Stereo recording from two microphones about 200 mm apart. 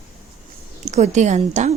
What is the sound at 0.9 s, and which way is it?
Speech, 35° right (ahead or behind).